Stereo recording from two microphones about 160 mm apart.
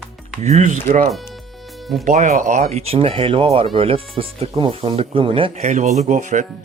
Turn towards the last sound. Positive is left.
turn(degrees=-50)  # may be behind; listen again after turning